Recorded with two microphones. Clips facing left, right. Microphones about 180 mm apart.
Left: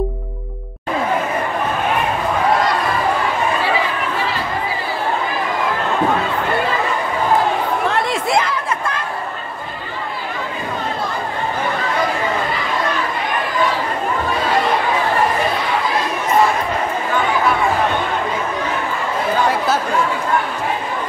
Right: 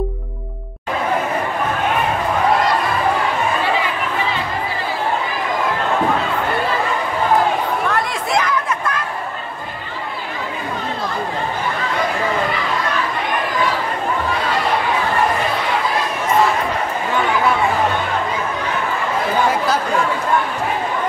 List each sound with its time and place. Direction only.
7.9 s chatter: 25° left (ahead or behind)